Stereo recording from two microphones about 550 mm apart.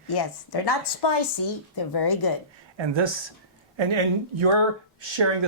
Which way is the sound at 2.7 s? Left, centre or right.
Right.